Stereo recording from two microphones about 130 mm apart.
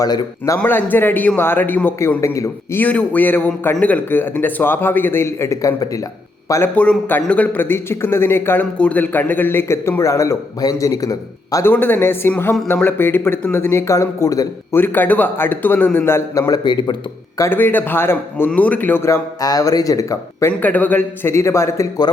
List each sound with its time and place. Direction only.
0.0 s a man's voice: 30° left (ahead or behind)
2.8 s a man's voice: 10° left (ahead or behind)
6.5 s a man's voice: 15° left (ahead or behind)
11.7 s a man's voice: 15° left (ahead or behind)
20.5 s a man's voice: 10° left (ahead or behind)